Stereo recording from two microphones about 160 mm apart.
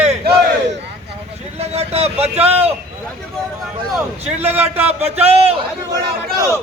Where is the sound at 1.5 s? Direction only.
40° right (ahead or behind).